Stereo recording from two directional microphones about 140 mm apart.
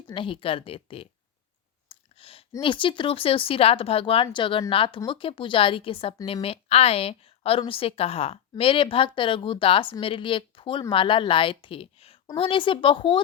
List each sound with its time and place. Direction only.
0.1 s speech: 40° left (ahead or behind)
1.9 s clicking: 40° left (ahead or behind)
2.6 s a woman's voice: 35° left (ahead or behind)